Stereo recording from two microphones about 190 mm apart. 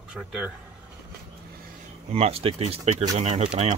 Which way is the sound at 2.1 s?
35° right (ahead or behind).